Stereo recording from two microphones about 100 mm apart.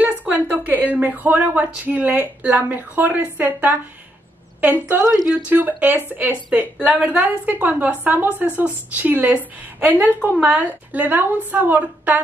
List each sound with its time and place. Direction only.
0.0 s a woman's voice: 15° right (ahead or behind)